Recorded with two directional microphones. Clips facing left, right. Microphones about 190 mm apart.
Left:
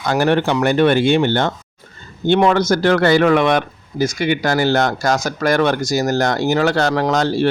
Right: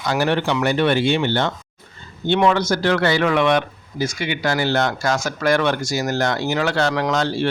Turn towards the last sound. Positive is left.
turn(degrees=40)  # may be behind; listen again after turning